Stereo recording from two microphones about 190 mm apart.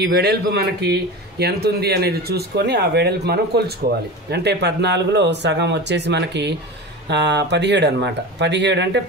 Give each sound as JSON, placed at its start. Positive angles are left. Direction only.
{"t": 0.0, "sound": "a man's voice", "side_deg": -60}